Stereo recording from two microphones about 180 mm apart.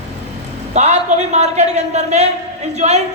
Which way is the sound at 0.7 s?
40° right (ahead or behind).